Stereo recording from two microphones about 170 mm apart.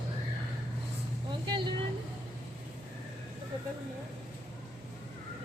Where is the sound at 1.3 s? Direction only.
30° right (ahead or behind).